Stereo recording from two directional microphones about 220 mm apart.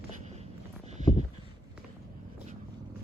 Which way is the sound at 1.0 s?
35° right (ahead or behind).